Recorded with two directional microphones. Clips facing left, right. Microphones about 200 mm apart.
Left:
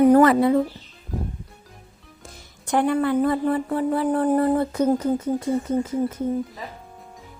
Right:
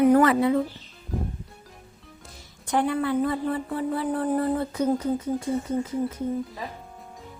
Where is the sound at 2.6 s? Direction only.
50° left (ahead or behind).